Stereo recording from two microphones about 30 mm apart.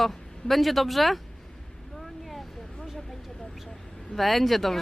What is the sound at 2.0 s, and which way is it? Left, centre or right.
Vehicle, centre.